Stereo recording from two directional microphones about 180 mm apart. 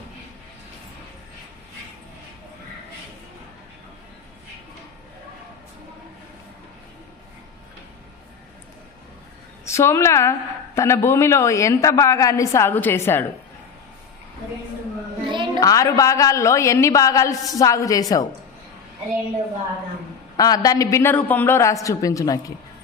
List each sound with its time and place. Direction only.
9.6 s a man's voice: 15° left (ahead or behind)
15.3 s music: 25° right (ahead or behind)
15.6 s a man's voice: 20° left (ahead or behind)
20.3 s a man's voice: 20° left (ahead or behind)